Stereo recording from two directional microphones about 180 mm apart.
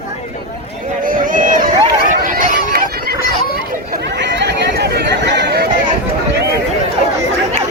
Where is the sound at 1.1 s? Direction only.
50° right (ahead or behind).